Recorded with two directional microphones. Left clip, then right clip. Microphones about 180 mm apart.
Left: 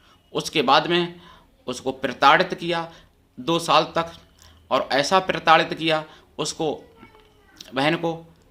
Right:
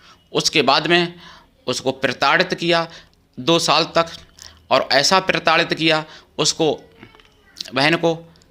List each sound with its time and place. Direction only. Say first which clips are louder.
0.0 s a man's voice: right 8 dB; 15° right (ahead or behind)